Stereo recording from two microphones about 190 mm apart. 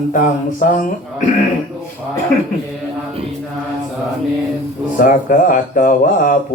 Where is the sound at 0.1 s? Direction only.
45° left (ahead or behind).